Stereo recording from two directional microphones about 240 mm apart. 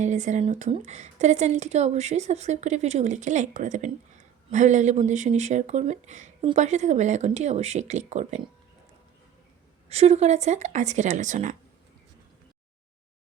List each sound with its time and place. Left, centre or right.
0.0 s speech: right
9.9 s speech: right